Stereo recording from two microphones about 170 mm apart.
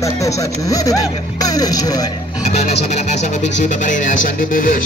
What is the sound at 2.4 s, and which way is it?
Speech, 40° left (ahead or behind).